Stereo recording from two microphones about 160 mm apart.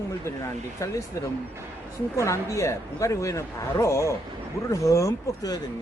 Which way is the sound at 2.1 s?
20° left (ahead or behind).